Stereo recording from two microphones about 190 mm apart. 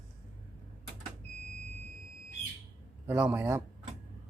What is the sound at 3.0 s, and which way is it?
Speech, 10° right (ahead or behind).